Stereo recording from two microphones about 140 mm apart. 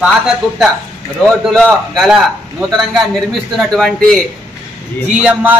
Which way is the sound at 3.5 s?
Centre (ahead or behind).